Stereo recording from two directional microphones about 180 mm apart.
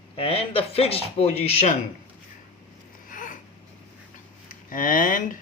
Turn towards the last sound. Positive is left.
turn(degrees=50)  # may be behind; listen again after turning